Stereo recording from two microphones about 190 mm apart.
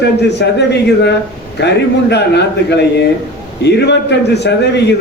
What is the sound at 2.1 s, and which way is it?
A man's voice, 65° left (ahead or behind).